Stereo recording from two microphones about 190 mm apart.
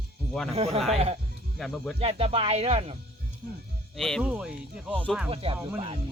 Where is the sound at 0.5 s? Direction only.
35° right (ahead or behind).